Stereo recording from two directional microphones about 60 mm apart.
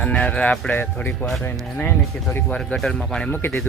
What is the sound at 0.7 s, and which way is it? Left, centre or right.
Speech, left.